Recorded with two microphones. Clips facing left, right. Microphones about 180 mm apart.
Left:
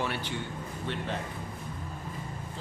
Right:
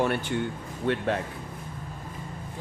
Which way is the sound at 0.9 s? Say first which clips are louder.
Right 10 dB; 60° right (ahead or behind).